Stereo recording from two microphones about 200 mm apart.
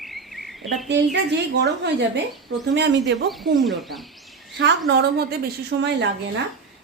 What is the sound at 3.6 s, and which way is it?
Speech, centre (ahead or behind).